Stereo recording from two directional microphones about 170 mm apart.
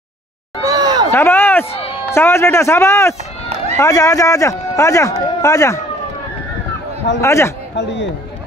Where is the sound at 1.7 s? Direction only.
35° left (ahead or behind).